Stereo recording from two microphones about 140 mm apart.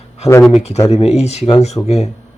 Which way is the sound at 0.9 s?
50° left (ahead or behind).